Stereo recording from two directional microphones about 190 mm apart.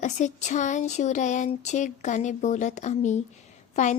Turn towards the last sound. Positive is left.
turn(degrees=40)  # may be behind; listen again after turning